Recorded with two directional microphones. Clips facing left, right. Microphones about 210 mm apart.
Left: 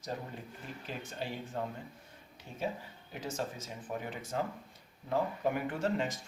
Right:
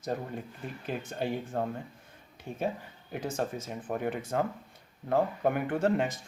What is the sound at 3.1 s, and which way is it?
Speech, 55° right (ahead or behind).